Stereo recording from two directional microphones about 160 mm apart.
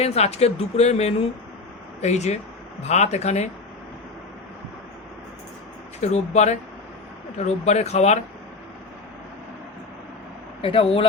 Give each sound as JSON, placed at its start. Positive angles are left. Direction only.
{"t": 0.0, "sound": "speech", "side_deg": 40}
{"t": 6.0, "sound": "speech", "side_deg": 45}
{"t": 10.6, "sound": "speech", "side_deg": 35}